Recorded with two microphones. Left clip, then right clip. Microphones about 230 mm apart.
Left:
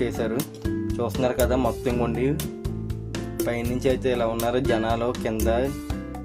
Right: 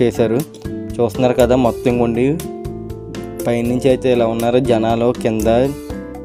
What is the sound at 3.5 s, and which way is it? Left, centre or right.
Speech, right.